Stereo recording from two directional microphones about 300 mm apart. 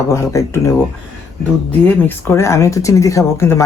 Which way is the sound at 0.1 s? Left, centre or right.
Centre.